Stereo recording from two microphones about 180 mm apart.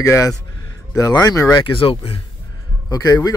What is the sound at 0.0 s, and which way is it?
Speech, 15° left (ahead or behind).